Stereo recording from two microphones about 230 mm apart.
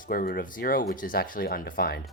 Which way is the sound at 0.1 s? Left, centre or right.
Left.